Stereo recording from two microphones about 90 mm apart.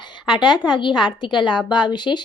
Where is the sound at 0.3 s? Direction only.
60° left (ahead or behind).